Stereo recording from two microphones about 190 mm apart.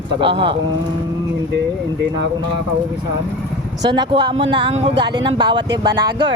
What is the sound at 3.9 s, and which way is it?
Speech, 25° right (ahead or behind).